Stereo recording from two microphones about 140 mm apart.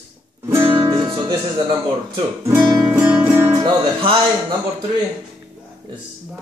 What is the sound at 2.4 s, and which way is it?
Guitar, 30° right (ahead or behind).